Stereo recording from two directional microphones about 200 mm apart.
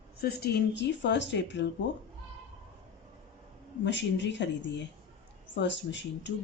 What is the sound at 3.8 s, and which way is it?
Speech, 60° left (ahead or behind).